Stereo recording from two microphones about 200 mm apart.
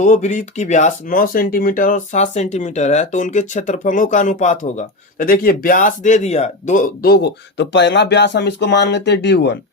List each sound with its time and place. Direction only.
0.0 s speech: 40° left (ahead or behind); by 9.6 s 60° left (ahead or behind)